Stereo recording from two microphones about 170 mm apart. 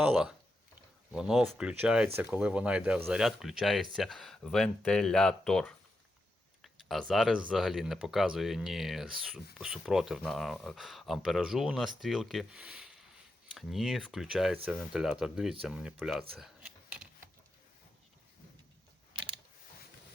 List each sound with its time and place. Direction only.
0.0 s speech: 5° right (ahead or behind)
16.4 s computer keyboard: 5° right (ahead or behind)
19.1 s mechanisms: 25° right (ahead or behind)